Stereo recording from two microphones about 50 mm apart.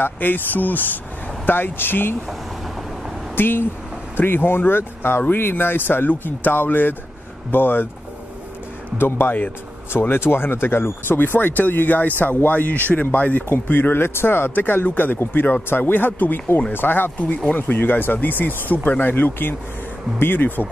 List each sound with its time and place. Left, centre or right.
0.0 s speech: left
3.3 s speech: left
8.9 s speech: left